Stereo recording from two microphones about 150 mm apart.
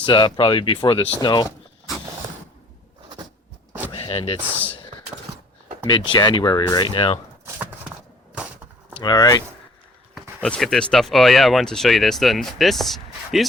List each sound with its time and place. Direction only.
0.0 s speech: 30° left (ahead or behind)
3.9 s a sound: 40° left (ahead or behind)
5.9 s speech: 30° left (ahead or behind)
7.4 s horse: 10° right (ahead or behind)
9.0 s speech: 25° left (ahead or behind)
10.2 s speech: 5° left (ahead or behind)